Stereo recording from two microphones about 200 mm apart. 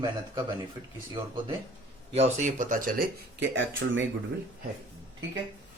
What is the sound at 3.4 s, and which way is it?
Speech, 70° right (ahead or behind).